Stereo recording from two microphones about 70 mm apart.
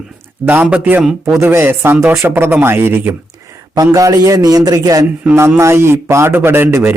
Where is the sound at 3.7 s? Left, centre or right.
Right.